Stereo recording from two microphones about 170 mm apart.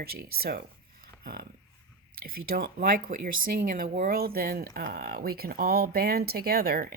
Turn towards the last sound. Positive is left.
turn(degrees=-65)  # may be behind; listen again after turning